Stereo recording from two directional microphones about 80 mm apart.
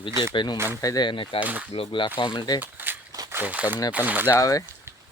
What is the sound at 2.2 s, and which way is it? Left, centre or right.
Speech, left.